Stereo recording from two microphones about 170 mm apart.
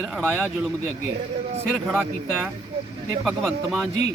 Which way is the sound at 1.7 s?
5° left (ahead or behind).